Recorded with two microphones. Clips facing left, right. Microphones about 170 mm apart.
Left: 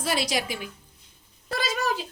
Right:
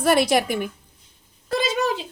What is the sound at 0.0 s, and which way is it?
Speech, 55° right (ahead or behind).